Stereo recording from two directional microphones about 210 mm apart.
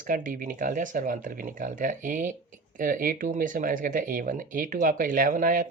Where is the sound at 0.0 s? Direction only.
40° right (ahead or behind).